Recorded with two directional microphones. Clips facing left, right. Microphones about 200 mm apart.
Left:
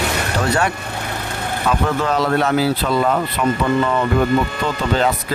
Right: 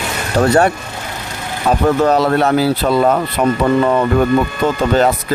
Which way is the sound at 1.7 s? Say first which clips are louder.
Right 7 dB; 40° right (ahead or behind).